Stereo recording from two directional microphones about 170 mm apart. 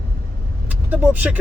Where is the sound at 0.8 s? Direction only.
10° right (ahead or behind).